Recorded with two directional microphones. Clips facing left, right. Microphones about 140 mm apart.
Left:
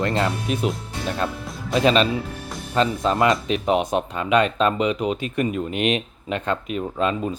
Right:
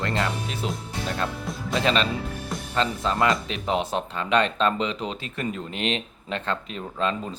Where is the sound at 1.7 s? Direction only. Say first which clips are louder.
Left 5 dB; 20° left (ahead or behind).